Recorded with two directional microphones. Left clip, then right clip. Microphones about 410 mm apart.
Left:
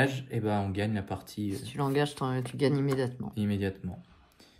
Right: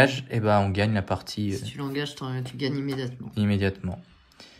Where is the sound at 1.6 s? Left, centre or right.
Centre.